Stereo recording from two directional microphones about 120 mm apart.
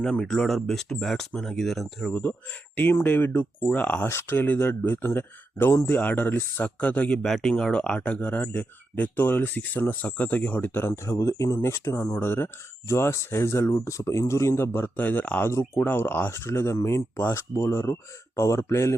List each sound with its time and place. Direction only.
0.0 s speech: 5° left (ahead or behind)
2.1 s speech: 15° left (ahead or behind); by 12.2 s 30° left (ahead or behind)
12.2 s speech: 20° left (ahead or behind)